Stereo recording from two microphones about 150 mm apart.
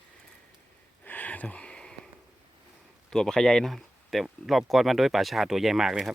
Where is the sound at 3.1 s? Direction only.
5° left (ahead or behind).